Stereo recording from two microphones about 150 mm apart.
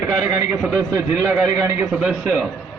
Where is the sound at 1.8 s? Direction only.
5° right (ahead or behind).